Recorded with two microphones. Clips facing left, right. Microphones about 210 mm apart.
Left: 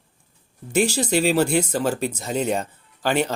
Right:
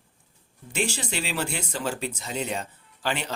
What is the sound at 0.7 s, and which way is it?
Speech, 40° left (ahead or behind).